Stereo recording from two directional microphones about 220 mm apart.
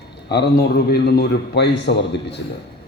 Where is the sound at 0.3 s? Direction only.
50° left (ahead or behind).